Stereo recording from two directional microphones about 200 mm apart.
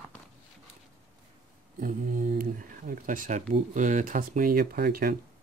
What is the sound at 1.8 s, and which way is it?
Speech, 40° right (ahead or behind).